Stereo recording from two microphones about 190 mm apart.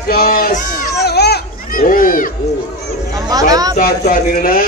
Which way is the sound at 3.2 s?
20° right (ahead or behind).